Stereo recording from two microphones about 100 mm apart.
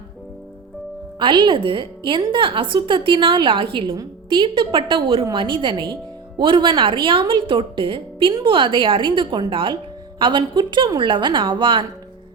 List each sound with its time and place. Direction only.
1.2 s speech: 55° right (ahead or behind)